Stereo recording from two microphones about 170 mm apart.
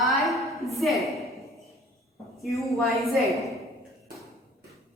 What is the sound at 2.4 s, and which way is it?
Speech, centre (ahead or behind).